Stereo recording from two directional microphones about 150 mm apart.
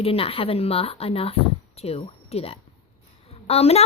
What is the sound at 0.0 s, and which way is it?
A woman's voice, 40° left (ahead or behind).